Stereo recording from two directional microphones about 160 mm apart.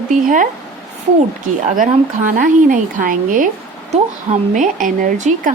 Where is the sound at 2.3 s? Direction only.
60° right (ahead or behind).